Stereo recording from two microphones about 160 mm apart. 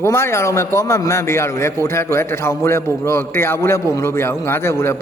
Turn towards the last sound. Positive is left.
turn(degrees=15)  # may be behind; listen again after turning